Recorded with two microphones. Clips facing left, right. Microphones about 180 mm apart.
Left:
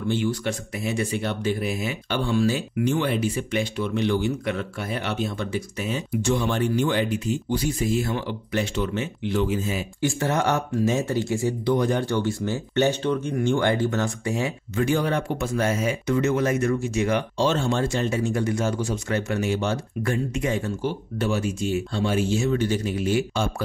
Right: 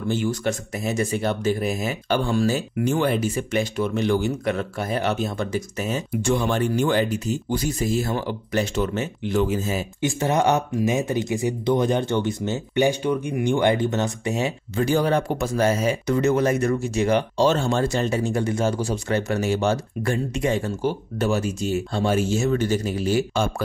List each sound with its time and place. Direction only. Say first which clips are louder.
0.1 s speech: right 2 dB; 45° right (ahead or behind)
10.0 s speech: right 2 dB; 20° right (ahead or behind)
14.9 s speech: right 4 dB; 35° right (ahead or behind)